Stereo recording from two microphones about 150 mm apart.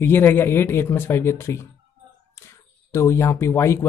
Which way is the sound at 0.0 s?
15° left (ahead or behind).